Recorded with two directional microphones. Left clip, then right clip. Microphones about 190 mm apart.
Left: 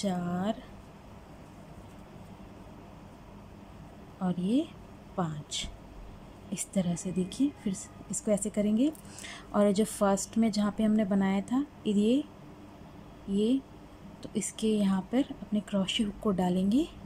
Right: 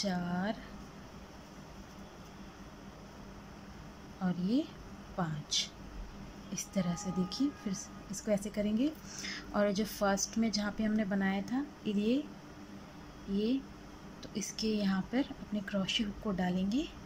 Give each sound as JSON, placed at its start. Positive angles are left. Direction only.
{"t": 0.0, "sound": "speech", "side_deg": 15}
{"t": 4.2, "sound": "speech", "side_deg": 15}
{"t": 13.3, "sound": "speech", "side_deg": 15}